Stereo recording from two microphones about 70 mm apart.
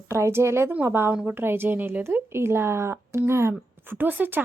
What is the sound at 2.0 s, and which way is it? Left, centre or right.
Speech, right.